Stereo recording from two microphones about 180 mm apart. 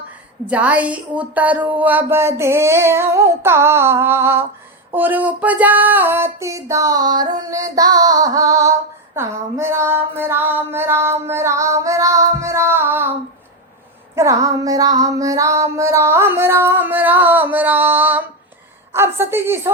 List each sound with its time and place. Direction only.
0.4 s speech: 10° right (ahead or behind)
14.2 s female singing: 20° right (ahead or behind)
15.0 s speech: 20° right (ahead or behind)